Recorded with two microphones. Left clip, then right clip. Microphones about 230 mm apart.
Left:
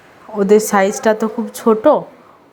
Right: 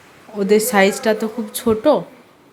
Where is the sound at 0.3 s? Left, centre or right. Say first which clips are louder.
Left 3 dB; centre.